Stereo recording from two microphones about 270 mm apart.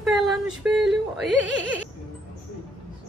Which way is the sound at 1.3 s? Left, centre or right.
Left.